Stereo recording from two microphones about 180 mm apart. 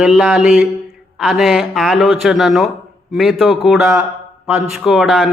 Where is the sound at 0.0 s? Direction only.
5° right (ahead or behind).